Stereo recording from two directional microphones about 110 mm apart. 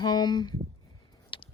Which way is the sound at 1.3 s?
50° left (ahead or behind).